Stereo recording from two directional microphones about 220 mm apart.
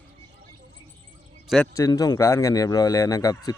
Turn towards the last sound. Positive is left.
turn(degrees=15)  # may be behind; listen again after turning